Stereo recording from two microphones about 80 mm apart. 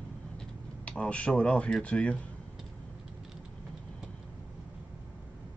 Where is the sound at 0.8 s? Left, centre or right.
Centre.